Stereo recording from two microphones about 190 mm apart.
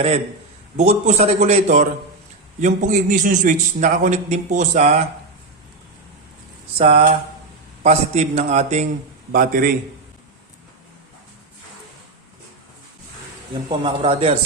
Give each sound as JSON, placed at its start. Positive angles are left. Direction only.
{"t": 0.8, "sound": "a man's voice", "side_deg": -35}
{"t": 6.7, "sound": "a man's voice", "side_deg": -35}
{"t": 9.3, "sound": "a man's voice", "side_deg": -50}
{"t": 13.5, "sound": "speech", "side_deg": -25}